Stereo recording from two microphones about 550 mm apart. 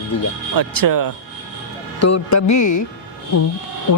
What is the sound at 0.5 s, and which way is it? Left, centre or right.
Speech, right.